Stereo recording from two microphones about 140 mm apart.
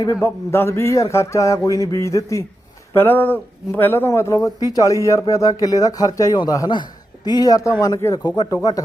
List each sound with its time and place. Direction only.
0.0 s speech: 20° left (ahead or behind)